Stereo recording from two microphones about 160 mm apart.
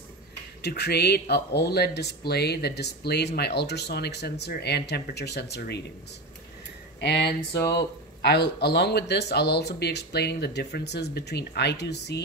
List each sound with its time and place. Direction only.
0.6 s speech: 90° left
7.0 s speech: 90° left